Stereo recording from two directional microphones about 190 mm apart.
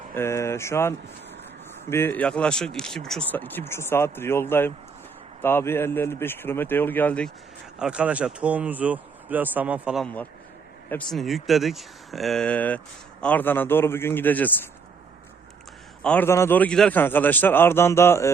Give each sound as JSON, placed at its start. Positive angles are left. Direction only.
{"t": 0.1, "sound": "a man's voice", "side_deg": 15}
{"t": 7.8, "sound": "a man's voice", "side_deg": -5}
{"t": 16.0, "sound": "a man's voice", "side_deg": 10}